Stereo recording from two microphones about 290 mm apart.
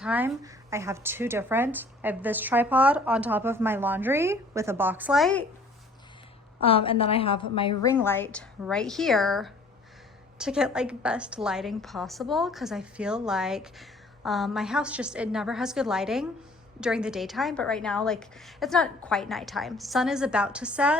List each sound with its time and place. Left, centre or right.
0.0 s speech: centre
6.6 s a woman's voice: centre
7.9 s a woman's voice: centre